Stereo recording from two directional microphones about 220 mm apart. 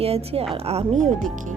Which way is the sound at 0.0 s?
25° right (ahead or behind).